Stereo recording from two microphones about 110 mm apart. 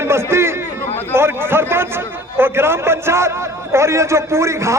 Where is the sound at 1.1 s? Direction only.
20° right (ahead or behind).